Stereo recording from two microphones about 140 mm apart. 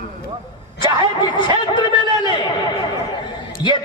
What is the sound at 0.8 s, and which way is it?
Speech, 35° left (ahead or behind).